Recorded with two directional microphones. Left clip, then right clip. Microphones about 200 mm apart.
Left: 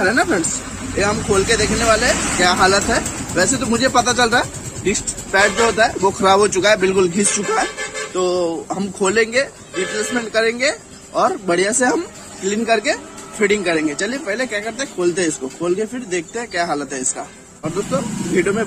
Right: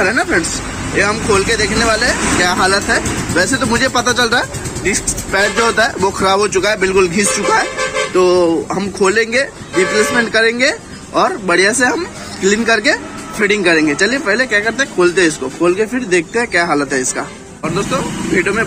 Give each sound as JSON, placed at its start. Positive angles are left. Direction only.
{"t": 0.0, "sound": "speech", "side_deg": 0}
{"t": 18.3, "sound": "speech", "side_deg": 15}